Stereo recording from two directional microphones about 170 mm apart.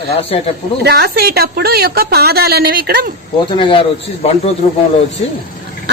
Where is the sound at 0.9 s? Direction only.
70° right (ahead or behind).